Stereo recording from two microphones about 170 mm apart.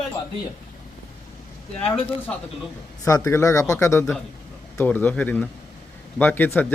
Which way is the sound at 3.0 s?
15° left (ahead or behind).